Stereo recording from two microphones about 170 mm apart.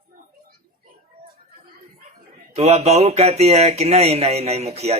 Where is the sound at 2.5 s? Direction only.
40° right (ahead or behind).